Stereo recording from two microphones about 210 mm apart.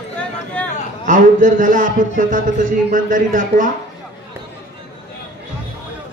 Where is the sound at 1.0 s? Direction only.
40° right (ahead or behind).